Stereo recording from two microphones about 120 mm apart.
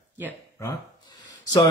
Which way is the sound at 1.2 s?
30° left (ahead or behind).